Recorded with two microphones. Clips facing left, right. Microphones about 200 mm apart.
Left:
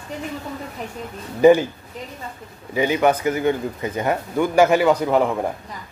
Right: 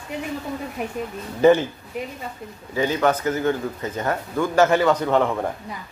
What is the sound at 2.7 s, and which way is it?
Speech, 15° left (ahead or behind).